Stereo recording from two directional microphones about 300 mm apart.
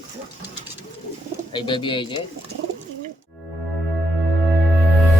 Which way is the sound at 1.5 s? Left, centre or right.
Centre.